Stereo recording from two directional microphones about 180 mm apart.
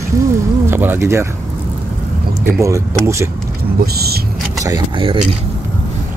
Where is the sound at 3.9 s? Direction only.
60° right (ahead or behind).